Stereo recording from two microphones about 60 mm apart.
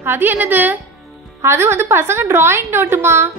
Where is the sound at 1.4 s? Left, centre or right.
Right.